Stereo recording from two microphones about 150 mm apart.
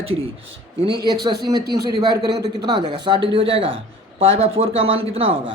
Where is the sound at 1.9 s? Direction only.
30° right (ahead or behind).